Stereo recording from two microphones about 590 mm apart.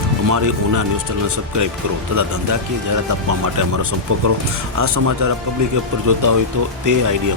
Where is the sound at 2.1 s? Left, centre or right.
Right.